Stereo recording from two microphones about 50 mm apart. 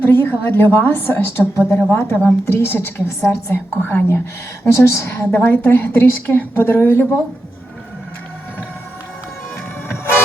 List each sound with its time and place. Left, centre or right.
0.0 s a woman's voice: left
1.9 s a woman's voice: left
3.5 s a woman's voice: left
4.6 s a woman's voice: left
5.1 s a woman's voice: left